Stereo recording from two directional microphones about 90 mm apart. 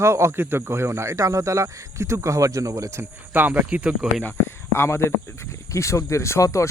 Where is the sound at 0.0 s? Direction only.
30° right (ahead or behind); by 4.1 s 15° right (ahead or behind).